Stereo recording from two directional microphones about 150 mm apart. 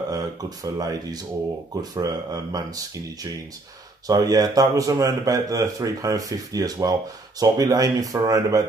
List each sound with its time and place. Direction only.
0.1 s speech: 25° right (ahead or behind)